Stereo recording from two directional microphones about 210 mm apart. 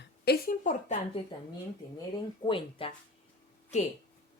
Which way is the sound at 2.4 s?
25° left (ahead or behind).